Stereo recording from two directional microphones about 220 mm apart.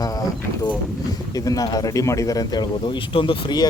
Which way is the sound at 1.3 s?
15° left (ahead or behind).